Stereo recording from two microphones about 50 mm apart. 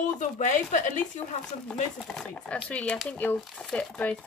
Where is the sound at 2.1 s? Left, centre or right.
Left.